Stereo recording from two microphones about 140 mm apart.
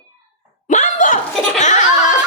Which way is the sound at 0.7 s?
60° left (ahead or behind).